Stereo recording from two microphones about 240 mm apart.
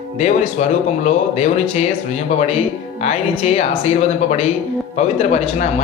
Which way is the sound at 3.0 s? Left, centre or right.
Left.